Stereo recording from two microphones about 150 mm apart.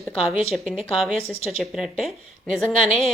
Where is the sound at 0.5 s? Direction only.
Centre (ahead or behind).